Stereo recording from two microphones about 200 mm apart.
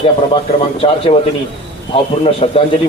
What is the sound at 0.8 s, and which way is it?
Speech, 30° left (ahead or behind).